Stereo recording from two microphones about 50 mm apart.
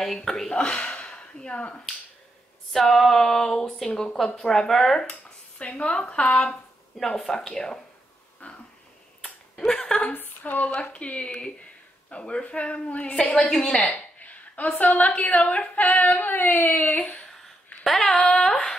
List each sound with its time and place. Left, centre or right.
0.0 s speech: centre; by 1.8 s left
2.7 s speech: centre
5.6 s a woman's voice: left
7.0 s speech: centre
8.4 s a sound: left
9.2 s finger snapping: centre
10.1 s speech: left
10.8 s a woman's voice: left
13.9 s a sound: left
14.8 s speech: left
17.0 s speech: centre